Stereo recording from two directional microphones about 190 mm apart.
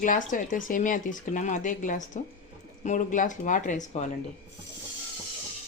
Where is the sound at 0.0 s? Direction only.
45° left (ahead or behind).